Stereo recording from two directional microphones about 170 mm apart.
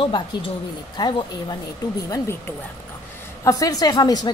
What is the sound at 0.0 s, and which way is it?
A woman's voice, 30° left (ahead or behind).